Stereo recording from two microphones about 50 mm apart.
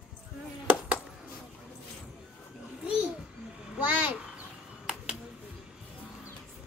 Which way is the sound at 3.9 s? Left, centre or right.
Right.